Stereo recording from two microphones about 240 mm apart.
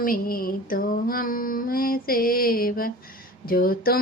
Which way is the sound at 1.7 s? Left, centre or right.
Left.